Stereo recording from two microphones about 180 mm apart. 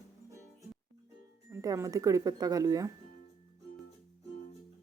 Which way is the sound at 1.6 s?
20° right (ahead or behind).